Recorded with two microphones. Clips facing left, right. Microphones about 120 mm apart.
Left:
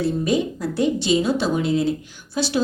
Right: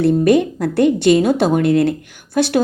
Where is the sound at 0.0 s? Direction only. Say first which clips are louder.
Right 8 dB; 60° right (ahead or behind).